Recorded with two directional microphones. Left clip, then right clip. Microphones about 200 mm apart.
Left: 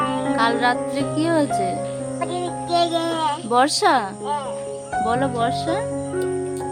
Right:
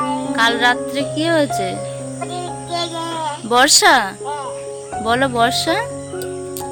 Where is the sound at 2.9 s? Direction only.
35° left (ahead or behind).